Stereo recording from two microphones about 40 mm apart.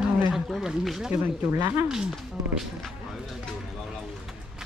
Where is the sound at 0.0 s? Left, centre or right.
Centre.